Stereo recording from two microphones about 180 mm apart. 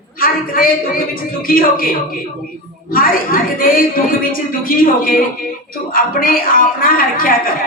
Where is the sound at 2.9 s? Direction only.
50° left (ahead or behind).